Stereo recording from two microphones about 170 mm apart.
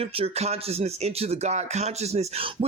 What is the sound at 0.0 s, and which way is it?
Speech, 35° right (ahead or behind).